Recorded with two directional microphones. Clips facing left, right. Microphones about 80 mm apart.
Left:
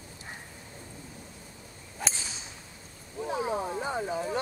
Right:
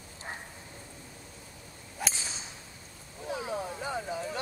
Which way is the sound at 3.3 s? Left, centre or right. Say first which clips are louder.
Left 4 dB; left.